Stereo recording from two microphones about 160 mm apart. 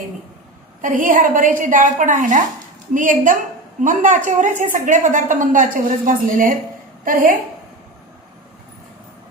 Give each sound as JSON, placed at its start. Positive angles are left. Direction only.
{"t": 0.8, "sound": "a woman's voice", "side_deg": -55}